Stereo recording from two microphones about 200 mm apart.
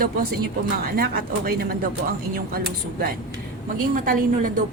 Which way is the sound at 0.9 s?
50° right (ahead or behind).